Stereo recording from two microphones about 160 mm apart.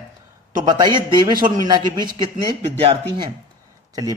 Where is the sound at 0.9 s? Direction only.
30° right (ahead or behind).